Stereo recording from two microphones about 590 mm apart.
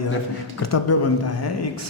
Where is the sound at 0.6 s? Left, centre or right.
Left.